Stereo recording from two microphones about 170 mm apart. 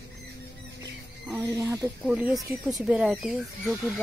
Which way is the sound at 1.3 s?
15° right (ahead or behind).